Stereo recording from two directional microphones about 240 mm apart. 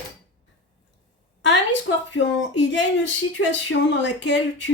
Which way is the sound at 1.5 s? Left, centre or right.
Left.